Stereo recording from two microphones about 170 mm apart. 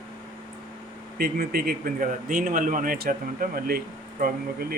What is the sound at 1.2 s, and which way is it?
Speech, 65° right (ahead or behind).